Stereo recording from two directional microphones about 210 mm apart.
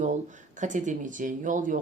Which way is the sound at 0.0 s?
35° right (ahead or behind).